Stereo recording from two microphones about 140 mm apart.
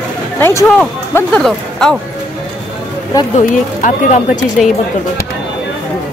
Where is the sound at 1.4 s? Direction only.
5° left (ahead or behind).